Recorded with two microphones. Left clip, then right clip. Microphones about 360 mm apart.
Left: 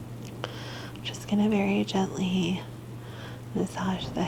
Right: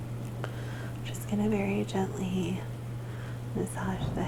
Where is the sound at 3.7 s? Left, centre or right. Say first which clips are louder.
Left 4 dB; left.